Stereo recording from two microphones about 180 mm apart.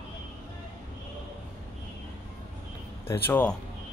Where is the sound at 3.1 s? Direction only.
10° left (ahead or behind).